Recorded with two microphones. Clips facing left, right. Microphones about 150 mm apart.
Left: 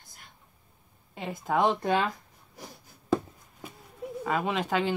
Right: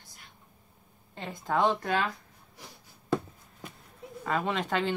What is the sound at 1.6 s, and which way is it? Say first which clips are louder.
Speech: left 2 dB; 20° left (ahead or behind).